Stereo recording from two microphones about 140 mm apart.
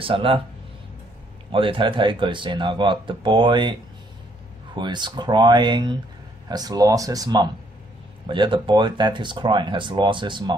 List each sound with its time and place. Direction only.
0.0 s speech: 40° right (ahead or behind)
1.5 s speech: 40° right (ahead or behind)
4.7 s speech: 35° right (ahead or behind)